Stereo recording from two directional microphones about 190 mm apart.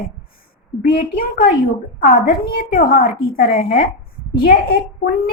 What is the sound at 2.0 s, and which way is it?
A woman's voice, 50° left (ahead or behind).